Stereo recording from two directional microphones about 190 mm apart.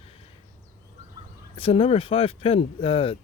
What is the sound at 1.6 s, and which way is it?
Speech, 30° left (ahead or behind).